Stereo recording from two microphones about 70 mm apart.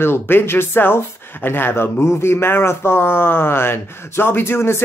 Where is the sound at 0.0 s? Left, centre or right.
Left.